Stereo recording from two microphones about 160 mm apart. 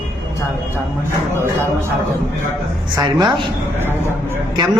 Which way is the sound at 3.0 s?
30° right (ahead or behind).